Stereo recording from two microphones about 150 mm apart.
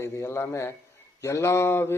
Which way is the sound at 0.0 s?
15° left (ahead or behind).